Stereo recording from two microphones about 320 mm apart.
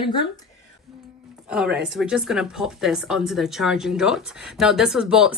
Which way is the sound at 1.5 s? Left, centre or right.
Centre.